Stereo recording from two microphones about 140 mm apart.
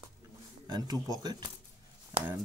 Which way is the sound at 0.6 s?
30° right (ahead or behind).